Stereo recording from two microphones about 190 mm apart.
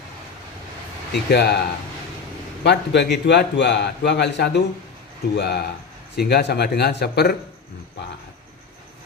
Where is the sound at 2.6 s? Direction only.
65° left (ahead or behind).